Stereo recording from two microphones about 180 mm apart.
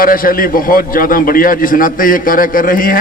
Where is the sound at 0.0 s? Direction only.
50° left (ahead or behind).